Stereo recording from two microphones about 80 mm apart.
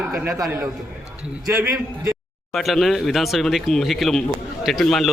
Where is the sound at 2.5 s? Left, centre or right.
Centre.